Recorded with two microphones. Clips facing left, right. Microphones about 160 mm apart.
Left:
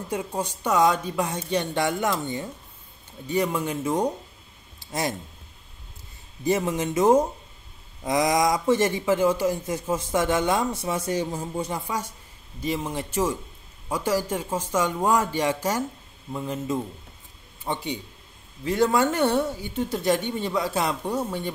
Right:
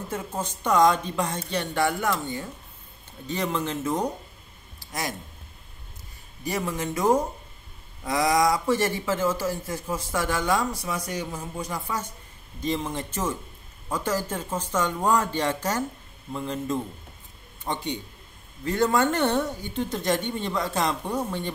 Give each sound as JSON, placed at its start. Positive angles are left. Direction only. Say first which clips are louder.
{"t": 0.1, "sound": "speech", "louder": "left 4 dB", "side_deg": 15}
{"t": 4.7, "sound": "a sound", "louder": "left 4 dB", "side_deg": 25}
{"t": 6.4, "sound": "a man's voice", "louder": "left 5 dB", "side_deg": 20}
{"t": 12.6, "sound": "a man's voice", "louder": "even", "side_deg": 10}